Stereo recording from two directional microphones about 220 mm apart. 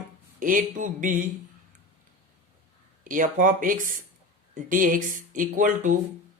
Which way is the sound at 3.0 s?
35° right (ahead or behind).